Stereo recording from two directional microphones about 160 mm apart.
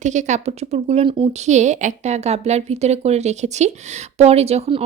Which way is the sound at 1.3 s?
45° right (ahead or behind).